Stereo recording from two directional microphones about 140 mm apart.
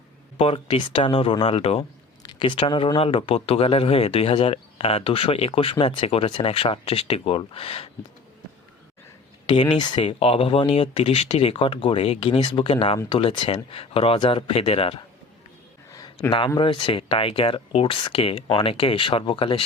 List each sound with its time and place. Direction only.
0.3 s speech: 40° left (ahead or behind)
2.2 s speech: 35° left (ahead or behind)
9.5 s speech: 35° left (ahead or behind)
15.9 s a sound: 25° left (ahead or behind)
16.6 s speech: 40° left (ahead or behind)